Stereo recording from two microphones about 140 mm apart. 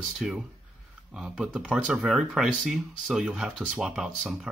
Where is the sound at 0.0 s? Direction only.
Centre (ahead or behind).